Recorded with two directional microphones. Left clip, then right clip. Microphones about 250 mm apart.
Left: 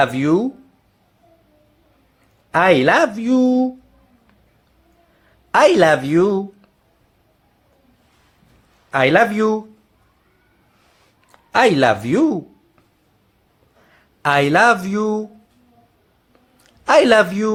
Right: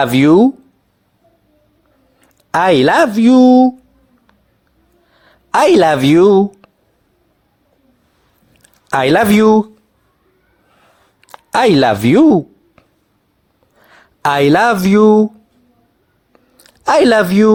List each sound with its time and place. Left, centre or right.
0.0 s speech: right
2.5 s speech: right
5.5 s speech: right
8.9 s speech: right
11.3 s speech: right
13.9 s speech: right
16.6 s speech: right